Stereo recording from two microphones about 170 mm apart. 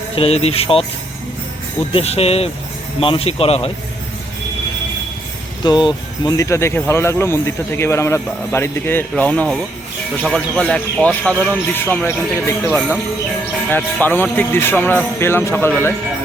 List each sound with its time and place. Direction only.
0.2 s speech: 35° left (ahead or behind)
1.9 s speech: 35° left (ahead or behind)
5.6 s speech: 25° left (ahead or behind)